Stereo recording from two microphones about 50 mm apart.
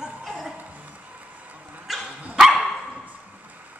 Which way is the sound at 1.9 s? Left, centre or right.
Centre.